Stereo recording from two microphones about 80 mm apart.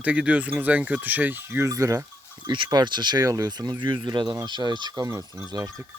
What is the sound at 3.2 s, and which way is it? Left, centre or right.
Speech, right.